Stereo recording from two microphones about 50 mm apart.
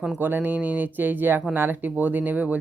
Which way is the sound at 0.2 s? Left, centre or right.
Right.